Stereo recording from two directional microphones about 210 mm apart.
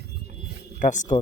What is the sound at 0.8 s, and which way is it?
Speech, 35° left (ahead or behind).